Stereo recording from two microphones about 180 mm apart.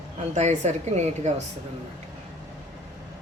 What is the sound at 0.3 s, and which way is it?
Speech, 40° right (ahead or behind).